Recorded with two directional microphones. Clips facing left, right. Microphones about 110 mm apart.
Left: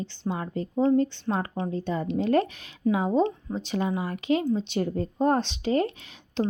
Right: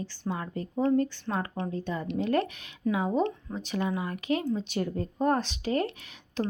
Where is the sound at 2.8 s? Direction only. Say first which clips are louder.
Left 4 dB; 15° left (ahead or behind).